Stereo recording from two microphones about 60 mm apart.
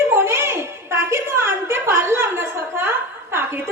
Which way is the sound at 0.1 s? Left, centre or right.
Right.